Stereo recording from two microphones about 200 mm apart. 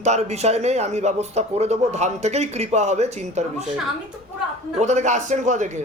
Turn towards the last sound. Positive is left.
turn(degrees=-35)  # may be behind; listen again after turning